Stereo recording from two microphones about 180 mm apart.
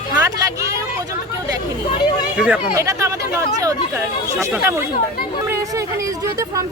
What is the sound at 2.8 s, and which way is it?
Speech, 15° right (ahead or behind).